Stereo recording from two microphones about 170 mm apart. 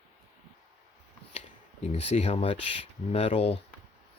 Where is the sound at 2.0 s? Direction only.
35° left (ahead or behind).